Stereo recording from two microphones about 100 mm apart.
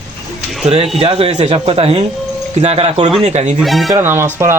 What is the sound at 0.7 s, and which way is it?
Speech, 80° right.